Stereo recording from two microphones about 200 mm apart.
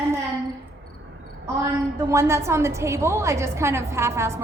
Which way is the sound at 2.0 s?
15° right (ahead or behind).